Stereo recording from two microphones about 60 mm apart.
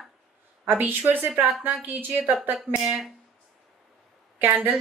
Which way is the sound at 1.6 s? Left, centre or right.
Right.